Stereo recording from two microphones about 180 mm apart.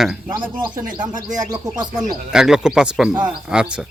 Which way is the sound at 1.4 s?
20° right (ahead or behind).